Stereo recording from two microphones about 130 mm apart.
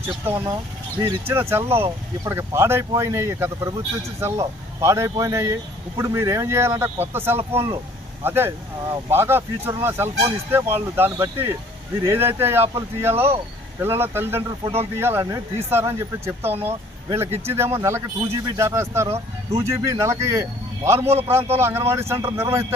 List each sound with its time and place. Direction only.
0.5 s speech: 30° right (ahead or behind)
1.3 s a man's voice: 20° right (ahead or behind)
19.0 s speech: 55° right (ahead or behind)
19.6 s a man's voice: 25° right (ahead or behind)